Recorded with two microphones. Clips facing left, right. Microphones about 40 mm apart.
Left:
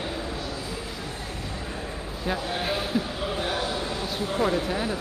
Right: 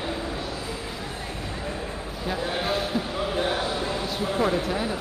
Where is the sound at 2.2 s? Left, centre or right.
Centre.